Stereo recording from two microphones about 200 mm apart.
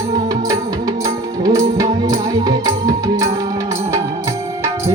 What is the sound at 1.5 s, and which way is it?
Music, 15° right (ahead or behind).